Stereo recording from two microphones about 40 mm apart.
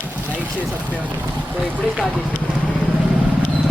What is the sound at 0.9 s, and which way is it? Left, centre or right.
Vehicle, right.